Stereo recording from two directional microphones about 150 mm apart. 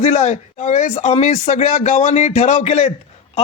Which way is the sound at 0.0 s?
50° left (ahead or behind).